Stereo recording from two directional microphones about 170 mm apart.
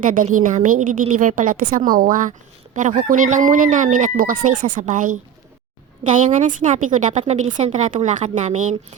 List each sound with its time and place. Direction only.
0.0 s a woman's voice: 50° right (ahead or behind)